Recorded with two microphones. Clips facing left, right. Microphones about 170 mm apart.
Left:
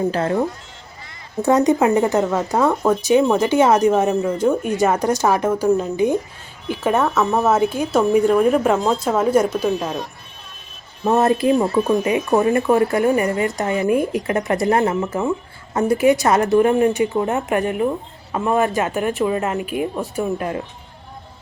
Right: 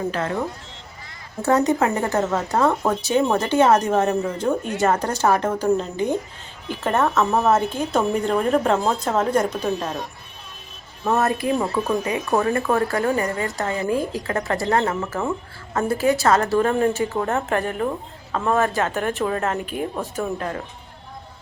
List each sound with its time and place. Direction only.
0.1 s speech: 35° left (ahead or behind)
1.5 s speech: 15° left (ahead or behind)
4.2 s speech: centre (ahead or behind)
4.8 s speech: 15° left (ahead or behind)
6.9 s speech: centre (ahead or behind)
11.0 s a woman's voice: 20° left (ahead or behind)
19.2 s speech: 10° left (ahead or behind)